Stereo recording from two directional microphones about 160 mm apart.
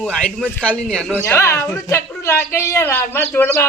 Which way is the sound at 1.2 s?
15° left (ahead or behind).